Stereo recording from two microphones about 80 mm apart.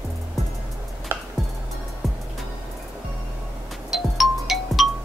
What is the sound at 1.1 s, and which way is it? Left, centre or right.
Music, right.